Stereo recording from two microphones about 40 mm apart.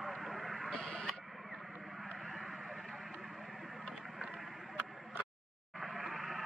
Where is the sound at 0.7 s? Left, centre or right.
Centre.